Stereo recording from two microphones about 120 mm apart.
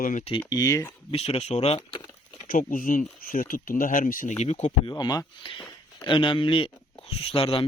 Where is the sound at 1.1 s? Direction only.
60° left (ahead or behind).